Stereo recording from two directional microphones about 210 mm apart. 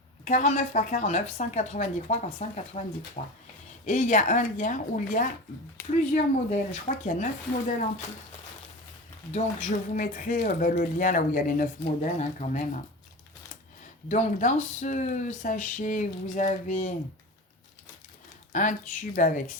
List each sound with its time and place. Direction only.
0.3 s speech: 35° left (ahead or behind)
9.3 s speech: 35° left (ahead or behind)
14.1 s speech: 35° left (ahead or behind)
18.5 s speech: 40° left (ahead or behind)